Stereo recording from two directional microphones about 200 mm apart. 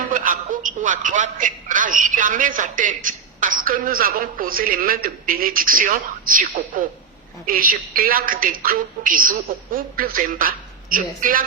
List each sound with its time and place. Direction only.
0.1 s a man's voice: 40° right (ahead or behind)